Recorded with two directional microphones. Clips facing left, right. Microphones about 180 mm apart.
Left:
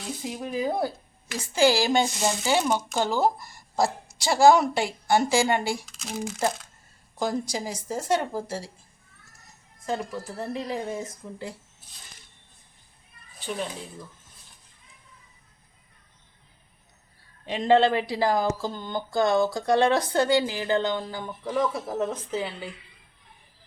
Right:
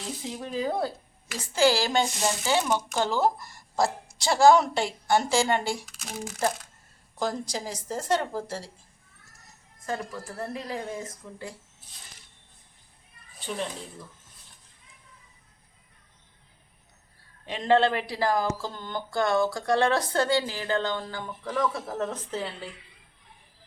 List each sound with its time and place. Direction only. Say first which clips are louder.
0.2 s speech: left 2 dB; 10° left (ahead or behind)
5.9 s speech: left 4 dB; 10° right (ahead or behind)
7.2 s speech: left 2 dB; 10° left (ahead or behind)
9.8 s speech: left 3 dB; 20° left (ahead or behind)
13.4 s speech: left 1 dB; centre (ahead or behind)
17.4 s speech: left 2 dB; 25° left (ahead or behind)
21.8 s speech: left 3 dB; 10° left (ahead or behind)